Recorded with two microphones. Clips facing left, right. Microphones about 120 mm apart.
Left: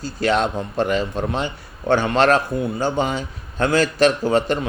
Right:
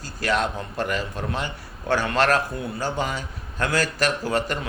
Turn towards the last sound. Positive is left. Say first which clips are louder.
# left 7 dB
turn(degrees=25)  # may be behind; listen again after turning